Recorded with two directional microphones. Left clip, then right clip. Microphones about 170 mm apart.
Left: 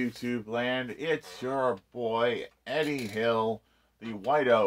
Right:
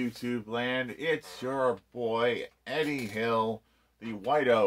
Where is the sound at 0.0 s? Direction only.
20° left (ahead or behind).